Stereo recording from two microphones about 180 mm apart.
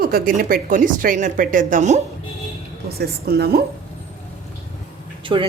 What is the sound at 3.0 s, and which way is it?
Speech, 60° right (ahead or behind).